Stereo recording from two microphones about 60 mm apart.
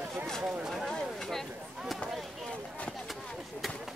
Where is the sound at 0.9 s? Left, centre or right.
Centre.